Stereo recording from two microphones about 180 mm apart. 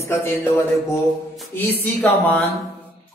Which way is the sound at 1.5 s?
10° left (ahead or behind).